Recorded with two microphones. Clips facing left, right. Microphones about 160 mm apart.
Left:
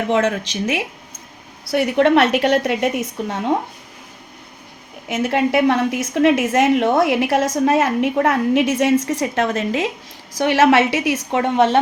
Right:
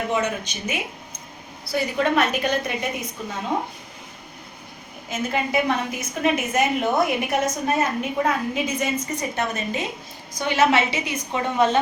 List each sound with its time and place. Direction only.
0.1 s a woman's voice: 90° left
1.7 s a woman's voice: 70° left (ahead or behind)
5.0 s a woman's voice: 80° left